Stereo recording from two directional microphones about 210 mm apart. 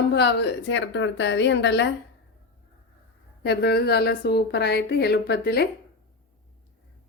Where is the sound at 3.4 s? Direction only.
50° left (ahead or behind).